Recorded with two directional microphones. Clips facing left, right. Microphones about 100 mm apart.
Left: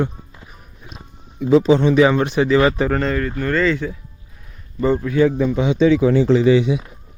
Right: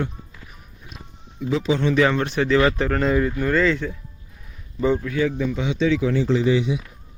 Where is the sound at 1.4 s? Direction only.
55° left (ahead or behind).